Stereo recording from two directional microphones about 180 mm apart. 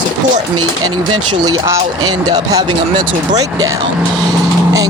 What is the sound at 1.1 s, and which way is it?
Speech, 25° right (ahead or behind).